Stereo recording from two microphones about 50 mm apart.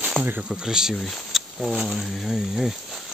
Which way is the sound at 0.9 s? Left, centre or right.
Centre.